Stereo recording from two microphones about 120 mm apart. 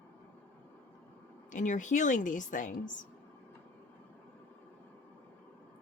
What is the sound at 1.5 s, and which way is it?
Speech, 90° left.